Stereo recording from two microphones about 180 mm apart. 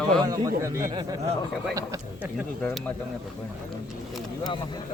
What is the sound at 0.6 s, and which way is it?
Speech, 15° right (ahead or behind).